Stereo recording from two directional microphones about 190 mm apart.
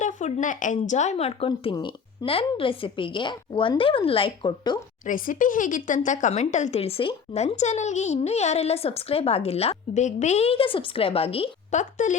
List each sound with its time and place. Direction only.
0.0 s a woman's voice: 40° left (ahead or behind); by 4.8 s 25° left (ahead or behind)
5.0 s speech: 45° left (ahead or behind)